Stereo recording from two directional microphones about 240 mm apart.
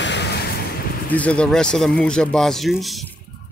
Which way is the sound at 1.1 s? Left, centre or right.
Centre.